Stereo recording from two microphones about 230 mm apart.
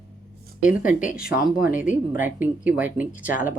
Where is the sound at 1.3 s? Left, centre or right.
Centre.